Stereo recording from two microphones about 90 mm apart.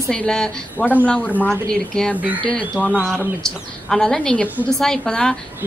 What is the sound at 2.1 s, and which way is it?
Speech, 15° right (ahead or behind).